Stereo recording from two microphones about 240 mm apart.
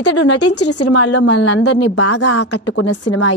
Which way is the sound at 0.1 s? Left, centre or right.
Left.